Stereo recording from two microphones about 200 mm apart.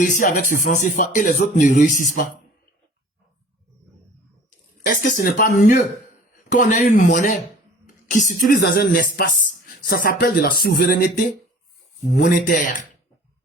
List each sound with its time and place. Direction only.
0.0 s speech: 40° left (ahead or behind)
4.9 s speech: 40° left (ahead or behind)